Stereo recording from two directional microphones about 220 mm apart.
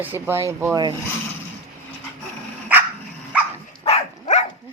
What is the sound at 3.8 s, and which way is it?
Dog, 30° left (ahead or behind).